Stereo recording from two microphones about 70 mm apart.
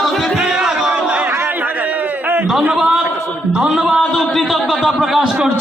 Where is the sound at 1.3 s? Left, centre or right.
Right.